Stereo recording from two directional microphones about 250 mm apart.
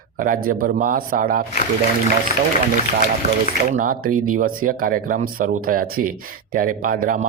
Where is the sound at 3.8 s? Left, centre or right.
Right.